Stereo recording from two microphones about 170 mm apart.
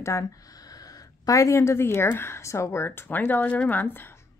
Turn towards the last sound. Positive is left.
turn(degrees=15)  # may be behind; listen again after turning